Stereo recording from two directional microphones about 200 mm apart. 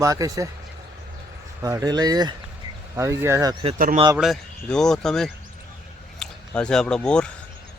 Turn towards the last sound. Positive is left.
turn(degrees=5)  # may be behind; listen again after turning